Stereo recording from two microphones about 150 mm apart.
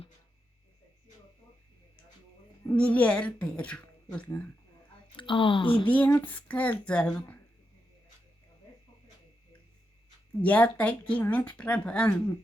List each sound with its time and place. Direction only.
2.6 s speech: 10° left (ahead or behind)
5.1 s a woman's voice: 35° left (ahead or behind)
5.8 s speech: 10° left (ahead or behind)
10.4 s speech: 10° left (ahead or behind)